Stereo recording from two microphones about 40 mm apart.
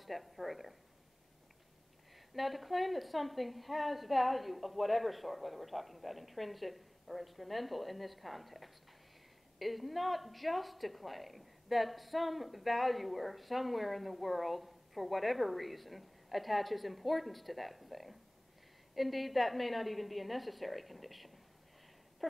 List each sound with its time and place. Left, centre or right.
0.0 s a woman's voice: centre
2.1 s a woman's voice: centre